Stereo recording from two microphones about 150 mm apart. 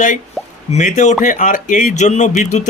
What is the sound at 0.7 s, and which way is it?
Speech, 55° left (ahead or behind).